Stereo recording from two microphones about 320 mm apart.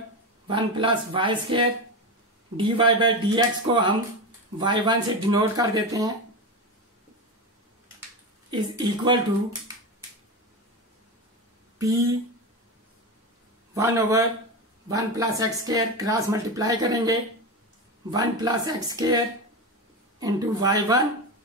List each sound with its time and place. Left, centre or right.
0.5 s speech: centre
8.5 s speech: centre
13.7 s speech: centre